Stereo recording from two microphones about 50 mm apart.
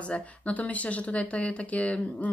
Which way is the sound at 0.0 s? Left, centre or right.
Left.